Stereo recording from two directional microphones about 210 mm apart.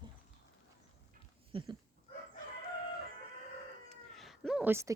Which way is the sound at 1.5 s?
20° right (ahead or behind).